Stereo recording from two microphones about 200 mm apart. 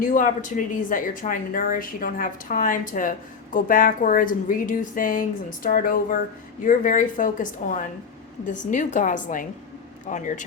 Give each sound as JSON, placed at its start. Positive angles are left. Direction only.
{"t": 0.0, "sound": "a woman's voice", "side_deg": 40}